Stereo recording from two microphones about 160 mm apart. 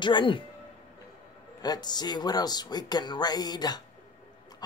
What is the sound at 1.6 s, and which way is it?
Speech, 25° left (ahead or behind).